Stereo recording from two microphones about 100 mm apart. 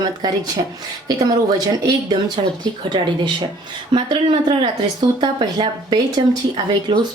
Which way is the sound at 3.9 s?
55° right (ahead or behind).